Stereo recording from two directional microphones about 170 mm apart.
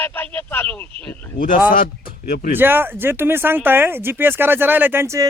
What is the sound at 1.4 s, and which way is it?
Speech, 55° left (ahead or behind).